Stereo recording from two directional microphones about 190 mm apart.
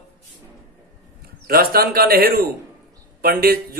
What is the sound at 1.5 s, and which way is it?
Speech, 50° right (ahead or behind).